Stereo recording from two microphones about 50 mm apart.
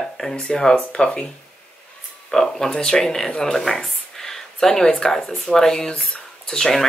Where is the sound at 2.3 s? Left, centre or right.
Centre.